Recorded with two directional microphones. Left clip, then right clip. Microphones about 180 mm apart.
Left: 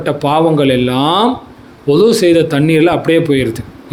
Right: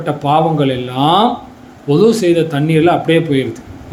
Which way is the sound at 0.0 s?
60° left (ahead or behind).